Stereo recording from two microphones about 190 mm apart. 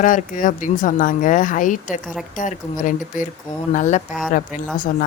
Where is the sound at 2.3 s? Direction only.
45° left (ahead or behind).